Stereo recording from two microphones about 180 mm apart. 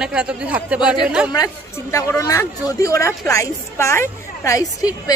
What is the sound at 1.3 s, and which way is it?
Speech, 20° left (ahead or behind).